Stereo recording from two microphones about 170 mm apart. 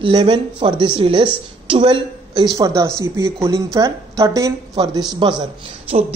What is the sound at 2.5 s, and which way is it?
A woman's voice, 20° right (ahead or behind).